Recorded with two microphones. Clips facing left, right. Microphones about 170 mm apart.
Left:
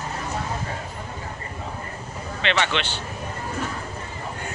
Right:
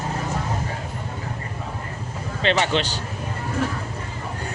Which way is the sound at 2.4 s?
40° right (ahead or behind).